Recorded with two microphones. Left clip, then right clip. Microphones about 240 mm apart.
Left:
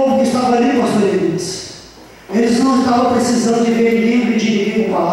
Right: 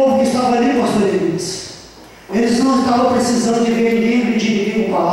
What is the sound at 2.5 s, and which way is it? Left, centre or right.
Speech, centre.